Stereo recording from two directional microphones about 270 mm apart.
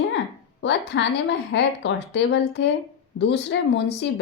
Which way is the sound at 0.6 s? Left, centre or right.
Left.